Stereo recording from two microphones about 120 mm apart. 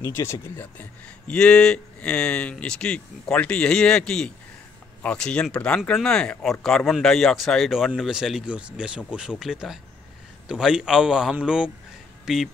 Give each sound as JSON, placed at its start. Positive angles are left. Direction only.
{"t": 0.0, "sound": "a man's voice", "side_deg": 25}